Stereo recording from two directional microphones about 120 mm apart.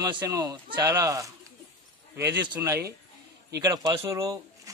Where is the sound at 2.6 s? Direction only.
25° right (ahead or behind).